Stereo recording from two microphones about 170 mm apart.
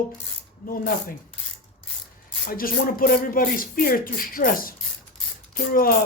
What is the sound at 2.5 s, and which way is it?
Speech, 55° left (ahead or behind).